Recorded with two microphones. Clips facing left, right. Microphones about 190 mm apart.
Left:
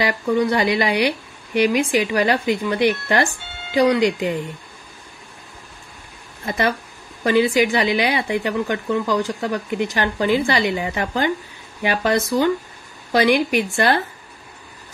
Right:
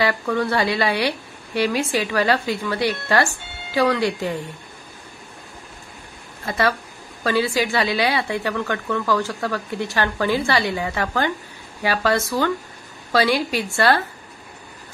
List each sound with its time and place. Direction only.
0.0 s speech: 15° left (ahead or behind)
6.4 s a woman's voice: 20° left (ahead or behind)